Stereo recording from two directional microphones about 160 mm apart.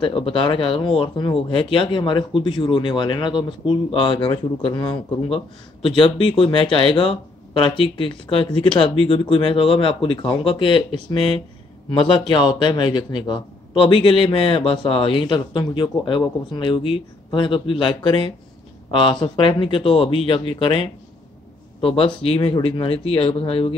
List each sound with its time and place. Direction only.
0.0 s speech: 35° left (ahead or behind)